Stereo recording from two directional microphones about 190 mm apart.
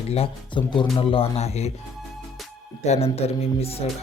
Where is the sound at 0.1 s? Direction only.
30° left (ahead or behind).